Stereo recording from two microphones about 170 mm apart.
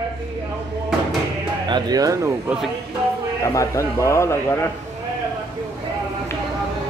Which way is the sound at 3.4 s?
20° left (ahead or behind).